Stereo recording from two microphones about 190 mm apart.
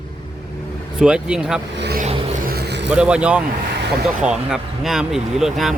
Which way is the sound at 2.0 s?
30° right (ahead or behind).